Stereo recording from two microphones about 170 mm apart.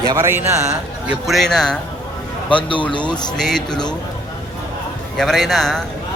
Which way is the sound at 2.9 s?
25° left (ahead or behind).